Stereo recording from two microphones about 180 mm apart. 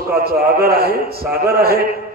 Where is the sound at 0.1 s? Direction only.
55° right (ahead or behind).